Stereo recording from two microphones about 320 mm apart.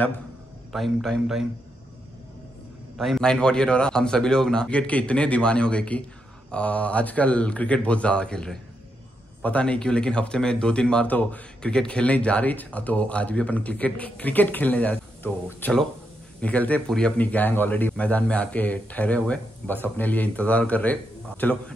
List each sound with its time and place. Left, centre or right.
0.7 s speech: centre
3.0 s speech: centre